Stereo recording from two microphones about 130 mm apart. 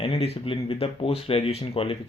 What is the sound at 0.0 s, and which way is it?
Speech, 45° left (ahead or behind).